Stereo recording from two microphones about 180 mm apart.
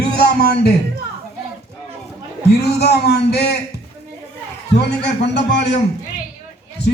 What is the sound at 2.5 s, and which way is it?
Speech, 65° left (ahead or behind).